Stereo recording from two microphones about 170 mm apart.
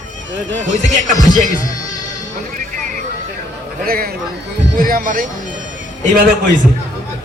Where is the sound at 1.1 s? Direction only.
50° right (ahead or behind).